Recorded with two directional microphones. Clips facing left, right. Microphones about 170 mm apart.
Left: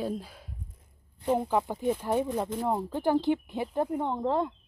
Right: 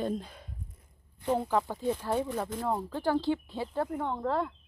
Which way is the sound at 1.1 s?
20° left (ahead or behind).